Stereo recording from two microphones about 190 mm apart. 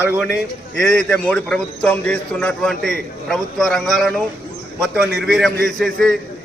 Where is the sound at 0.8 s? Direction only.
5° left (ahead or behind).